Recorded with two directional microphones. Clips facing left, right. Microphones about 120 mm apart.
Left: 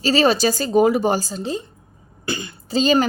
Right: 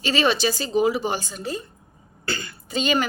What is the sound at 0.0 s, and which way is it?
Speech, 35° left (ahead or behind).